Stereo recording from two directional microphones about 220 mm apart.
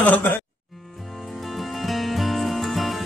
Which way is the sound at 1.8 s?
Centre (ahead or behind).